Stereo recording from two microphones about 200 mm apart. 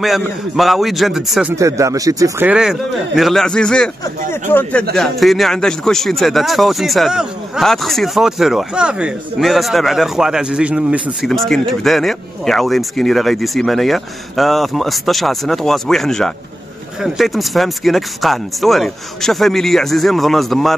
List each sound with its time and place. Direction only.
0.0 s speech: centre (ahead or behind)
1.5 s speech: 15° right (ahead or behind); by 20.7 s centre (ahead or behind)